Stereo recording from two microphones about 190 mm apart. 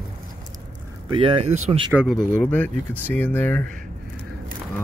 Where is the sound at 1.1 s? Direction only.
30° right (ahead or behind).